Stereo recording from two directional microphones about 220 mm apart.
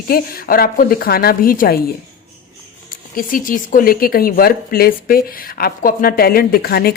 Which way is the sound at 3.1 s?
40° left (ahead or behind).